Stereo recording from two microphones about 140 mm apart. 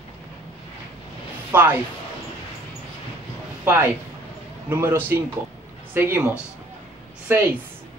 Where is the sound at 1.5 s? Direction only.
10° right (ahead or behind).